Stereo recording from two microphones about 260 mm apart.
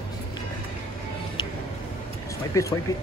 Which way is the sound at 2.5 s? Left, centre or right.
Centre.